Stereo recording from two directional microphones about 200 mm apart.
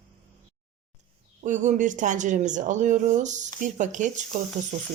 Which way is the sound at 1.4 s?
40° right (ahead or behind).